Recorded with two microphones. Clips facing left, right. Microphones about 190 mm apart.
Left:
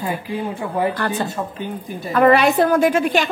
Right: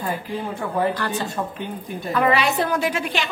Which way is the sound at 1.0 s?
55° left (ahead or behind).